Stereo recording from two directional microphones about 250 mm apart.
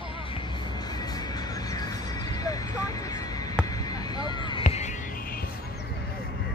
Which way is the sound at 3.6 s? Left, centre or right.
Centre.